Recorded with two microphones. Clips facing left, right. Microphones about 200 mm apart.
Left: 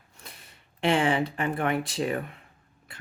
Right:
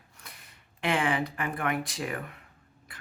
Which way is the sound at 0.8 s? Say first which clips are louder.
Left 4 dB; 25° left (ahead or behind).